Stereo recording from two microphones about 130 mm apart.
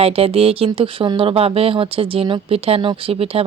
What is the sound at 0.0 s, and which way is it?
Speech, 50° right (ahead or behind).